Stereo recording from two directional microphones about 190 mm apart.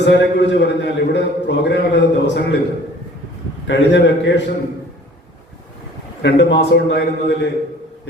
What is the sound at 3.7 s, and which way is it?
Speech, 70° left (ahead or behind).